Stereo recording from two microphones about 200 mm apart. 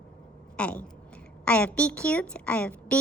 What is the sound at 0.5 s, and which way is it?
A woman's voice, 5° left (ahead or behind).